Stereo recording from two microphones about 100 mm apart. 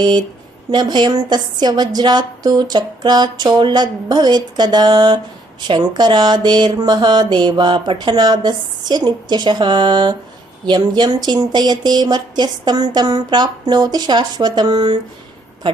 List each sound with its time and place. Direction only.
0.7 s a woman's voice: 45° right (ahead or behind)
15.6 s speech: 55° right (ahead or behind)